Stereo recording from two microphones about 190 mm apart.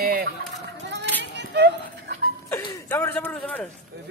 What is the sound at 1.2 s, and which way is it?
Music, 65° right (ahead or behind).